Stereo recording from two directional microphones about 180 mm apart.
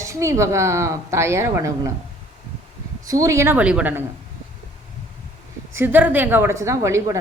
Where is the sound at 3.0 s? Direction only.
20° right (ahead or behind).